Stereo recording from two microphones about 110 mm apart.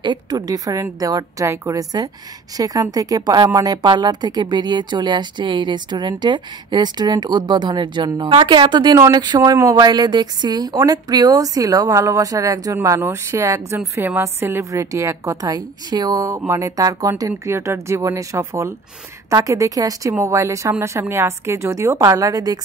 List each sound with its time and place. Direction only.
0.0 s a woman's voice: 40° right (ahead or behind)